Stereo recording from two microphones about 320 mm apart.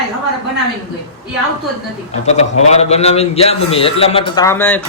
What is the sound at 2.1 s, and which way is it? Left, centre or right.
A man's voice, centre.